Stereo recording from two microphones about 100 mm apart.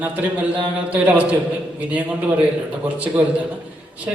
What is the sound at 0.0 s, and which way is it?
A man's voice, 15° right (ahead or behind).